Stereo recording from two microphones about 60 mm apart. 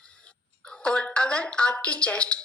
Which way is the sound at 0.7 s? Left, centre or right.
Centre.